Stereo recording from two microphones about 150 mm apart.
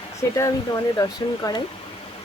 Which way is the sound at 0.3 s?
20° left (ahead or behind).